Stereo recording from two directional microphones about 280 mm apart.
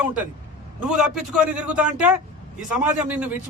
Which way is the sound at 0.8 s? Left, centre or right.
Centre.